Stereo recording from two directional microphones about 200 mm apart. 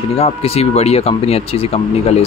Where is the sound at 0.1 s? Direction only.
30° left (ahead or behind).